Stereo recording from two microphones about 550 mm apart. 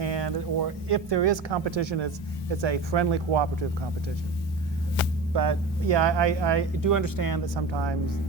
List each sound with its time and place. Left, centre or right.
0.0 s speech: right
5.3 s speech: right